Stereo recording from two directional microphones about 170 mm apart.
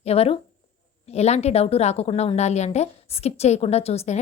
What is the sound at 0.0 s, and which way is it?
A woman's voice, 35° left (ahead or behind).